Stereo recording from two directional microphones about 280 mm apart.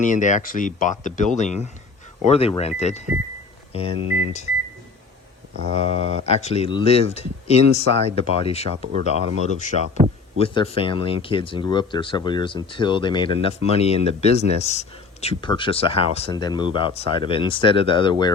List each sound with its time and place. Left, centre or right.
0.0 s speech: left
5.9 s speech: right
6.2 s speech: left